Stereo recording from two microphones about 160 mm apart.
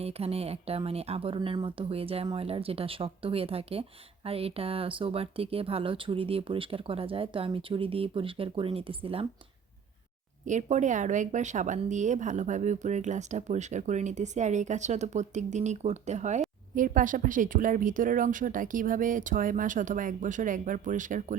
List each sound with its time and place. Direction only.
0.0 s speech: 40° right (ahead or behind)
10.4 s speech: 50° right (ahead or behind)
16.7 s speech: 55° right (ahead or behind)